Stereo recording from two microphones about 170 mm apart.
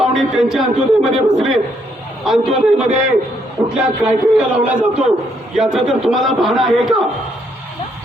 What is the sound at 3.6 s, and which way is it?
Speech, 20° right (ahead or behind).